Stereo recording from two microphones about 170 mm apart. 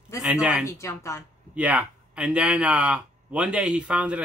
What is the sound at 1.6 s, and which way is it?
A man's voice, 10° right (ahead or behind).